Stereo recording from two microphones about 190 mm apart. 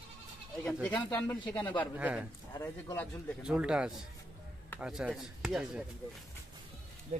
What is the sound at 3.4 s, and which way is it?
Speech, 5° right (ahead or behind).